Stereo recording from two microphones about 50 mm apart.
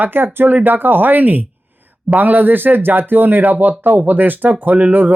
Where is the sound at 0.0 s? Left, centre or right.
Right.